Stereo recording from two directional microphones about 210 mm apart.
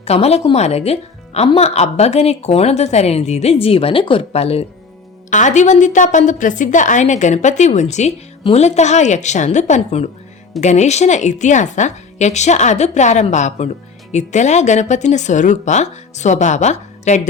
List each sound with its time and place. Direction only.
0.0 s a woman's voice: 30° left (ahead or behind)